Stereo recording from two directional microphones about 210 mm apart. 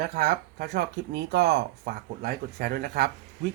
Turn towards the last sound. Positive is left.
turn(degrees=-50)  # may be behind; listen again after turning